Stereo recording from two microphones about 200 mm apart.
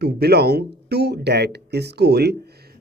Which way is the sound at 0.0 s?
55° right (ahead or behind).